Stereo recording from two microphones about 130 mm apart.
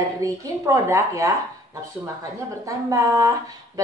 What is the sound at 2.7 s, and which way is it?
Speech, 25° right (ahead or behind).